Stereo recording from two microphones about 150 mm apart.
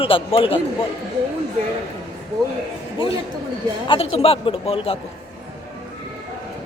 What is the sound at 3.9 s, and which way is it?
Speech, 40° left (ahead or behind).